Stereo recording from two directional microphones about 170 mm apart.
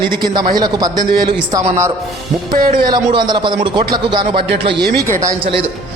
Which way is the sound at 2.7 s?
25° right (ahead or behind).